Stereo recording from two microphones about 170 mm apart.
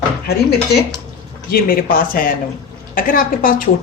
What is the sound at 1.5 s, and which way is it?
Speech, 60° left (ahead or behind).